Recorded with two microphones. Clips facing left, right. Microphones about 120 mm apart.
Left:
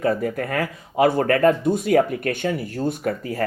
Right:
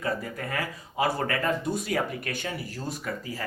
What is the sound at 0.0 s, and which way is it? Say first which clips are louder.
Speech: left 9 dB; 55° left (ahead or behind).